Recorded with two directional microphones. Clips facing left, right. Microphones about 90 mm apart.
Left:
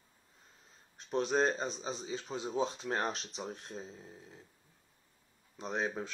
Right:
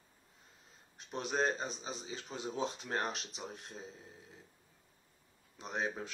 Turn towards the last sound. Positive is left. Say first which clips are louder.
# left 3 dB
turn(degrees=30)  # may be behind; listen again after turning